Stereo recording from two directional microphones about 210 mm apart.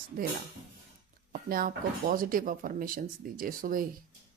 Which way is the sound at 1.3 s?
45° right (ahead or behind).